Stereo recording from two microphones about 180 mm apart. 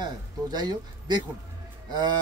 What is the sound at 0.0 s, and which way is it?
Speech, 25° right (ahead or behind).